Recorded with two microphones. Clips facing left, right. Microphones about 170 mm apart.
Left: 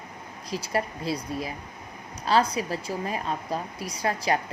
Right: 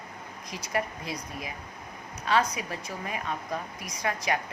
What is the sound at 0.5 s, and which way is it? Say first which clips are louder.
Speech: left 3 dB; 30° left (ahead or behind).